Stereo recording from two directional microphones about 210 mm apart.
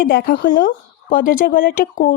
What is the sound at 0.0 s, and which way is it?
Speech, 45° left (ahead or behind).